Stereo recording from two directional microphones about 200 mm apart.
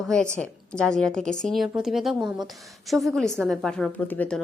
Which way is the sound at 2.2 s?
20° right (ahead or behind).